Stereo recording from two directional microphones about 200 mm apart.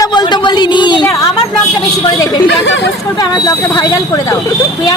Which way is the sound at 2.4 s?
60° left (ahead or behind).